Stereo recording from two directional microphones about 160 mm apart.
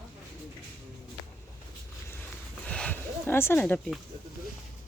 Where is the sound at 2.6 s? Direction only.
5° left (ahead or behind).